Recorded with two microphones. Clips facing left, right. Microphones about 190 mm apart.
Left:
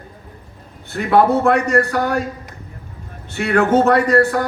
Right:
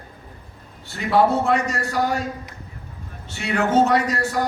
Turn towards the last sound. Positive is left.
turn(degrees=55)  # may be behind; listen again after turning